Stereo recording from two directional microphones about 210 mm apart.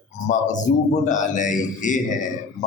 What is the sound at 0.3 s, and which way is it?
A man's voice, 35° left (ahead or behind).